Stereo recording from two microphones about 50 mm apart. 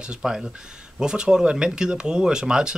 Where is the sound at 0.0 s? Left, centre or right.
Centre.